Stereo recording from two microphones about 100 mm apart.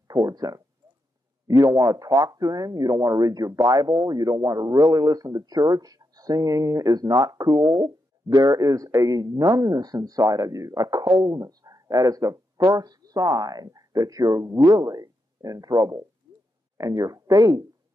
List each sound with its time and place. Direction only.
0.1 s speech: 40° right (ahead or behind)